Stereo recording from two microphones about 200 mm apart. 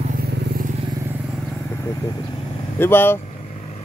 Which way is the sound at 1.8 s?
15° left (ahead or behind).